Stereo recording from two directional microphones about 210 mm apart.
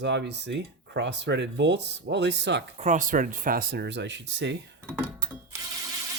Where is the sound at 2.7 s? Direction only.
35° right (ahead or behind); by 4.5 s 55° right (ahead or behind).